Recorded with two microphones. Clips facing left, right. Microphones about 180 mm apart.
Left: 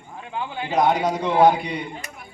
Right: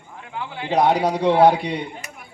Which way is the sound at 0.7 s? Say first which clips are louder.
Right 2 dB; 30° right (ahead or behind).